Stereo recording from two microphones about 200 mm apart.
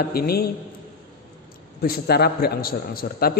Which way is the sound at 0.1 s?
50° left (ahead or behind).